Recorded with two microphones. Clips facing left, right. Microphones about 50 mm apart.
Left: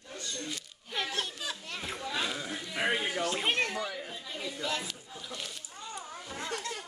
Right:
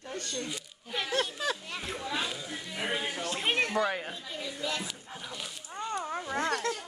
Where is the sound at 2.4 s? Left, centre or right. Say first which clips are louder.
Left 3 dB; left.